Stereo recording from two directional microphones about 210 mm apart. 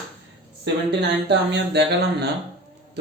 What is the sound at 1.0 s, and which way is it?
Speech, 55° right (ahead or behind).